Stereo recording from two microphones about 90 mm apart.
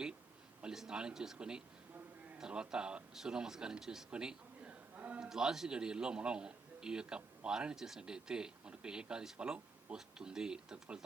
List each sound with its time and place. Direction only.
0.6 s a man's voice: 5° right (ahead or behind)
5.3 s a man's voice: 5° right (ahead or behind)